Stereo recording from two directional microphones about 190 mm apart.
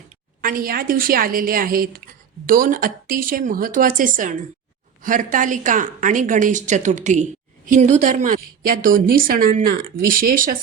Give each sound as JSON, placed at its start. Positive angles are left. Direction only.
{"t": 0.4, "sound": "a woman's voice", "side_deg": -50}